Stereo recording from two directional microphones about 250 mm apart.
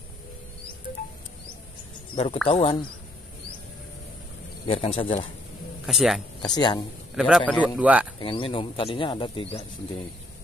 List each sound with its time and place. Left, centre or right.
2.4 s speech: left
4.6 s speech: left
5.9 s a man's voice: centre
6.4 s speech: centre
7.2 s a man's voice: centre
7.8 s a man's voice: centre
8.2 s speech: left